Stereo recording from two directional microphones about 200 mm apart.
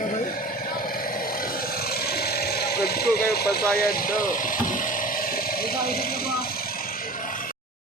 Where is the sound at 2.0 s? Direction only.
50° left (ahead or behind).